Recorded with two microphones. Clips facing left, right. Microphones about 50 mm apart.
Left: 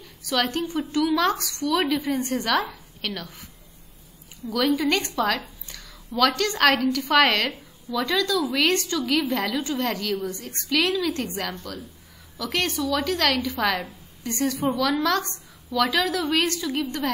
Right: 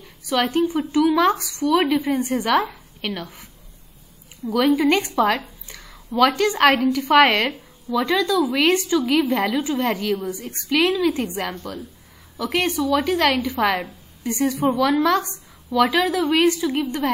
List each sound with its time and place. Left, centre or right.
0.4 s a woman's voice: centre
4.5 s a woman's voice: right
14.6 s a woman's voice: right
14.9 s a woman's voice: centre